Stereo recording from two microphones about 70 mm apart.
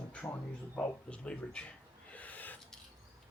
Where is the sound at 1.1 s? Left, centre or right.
Centre.